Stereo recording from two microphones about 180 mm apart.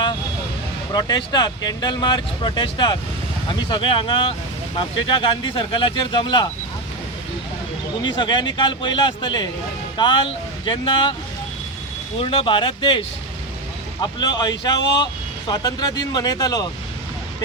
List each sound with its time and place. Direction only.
0.9 s speech: 25° left (ahead or behind)
8.0 s speech: 25° left (ahead or behind)
12.2 s speech: 30° left (ahead or behind)
14.0 s speech: 25° left (ahead or behind)